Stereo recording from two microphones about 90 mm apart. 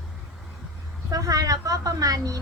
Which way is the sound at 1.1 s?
45° right (ahead or behind).